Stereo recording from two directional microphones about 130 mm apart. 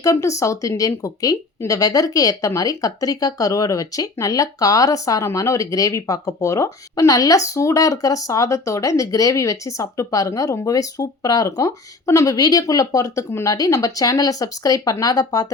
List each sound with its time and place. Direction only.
0.0 s speech: 25° left (ahead or behind)